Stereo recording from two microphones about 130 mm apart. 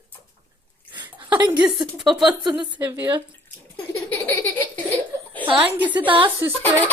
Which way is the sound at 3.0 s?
35° right (ahead or behind).